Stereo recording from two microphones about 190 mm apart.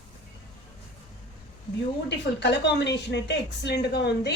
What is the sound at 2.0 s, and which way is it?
A woman's voice, 65° left (ahead or behind).